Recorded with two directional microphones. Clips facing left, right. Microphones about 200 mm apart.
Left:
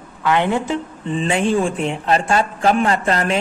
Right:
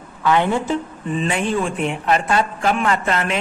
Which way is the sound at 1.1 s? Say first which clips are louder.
Left 3 dB; 30° left (ahead or behind).